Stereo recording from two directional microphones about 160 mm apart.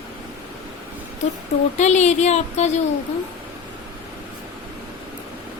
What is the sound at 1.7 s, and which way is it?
Speech, 45° left (ahead or behind).